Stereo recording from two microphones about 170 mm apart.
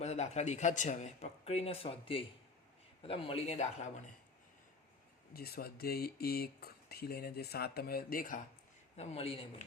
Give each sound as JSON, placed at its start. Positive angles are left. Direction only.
{"t": 0.0, "sound": "a man's voice", "side_deg": 40}
{"t": 5.3, "sound": "speech", "side_deg": 65}
{"t": 9.0, "sound": "a man's voice", "side_deg": 35}